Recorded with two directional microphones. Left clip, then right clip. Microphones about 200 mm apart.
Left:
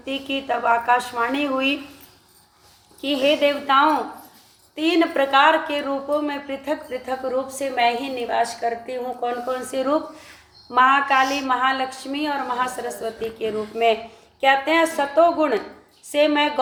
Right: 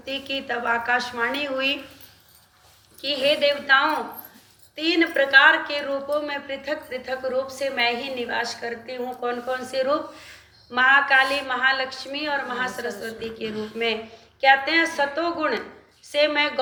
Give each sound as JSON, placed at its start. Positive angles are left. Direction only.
{"t": 0.0, "sound": "a woman's voice", "side_deg": 55}
{"t": 3.0, "sound": "a woman's voice", "side_deg": 55}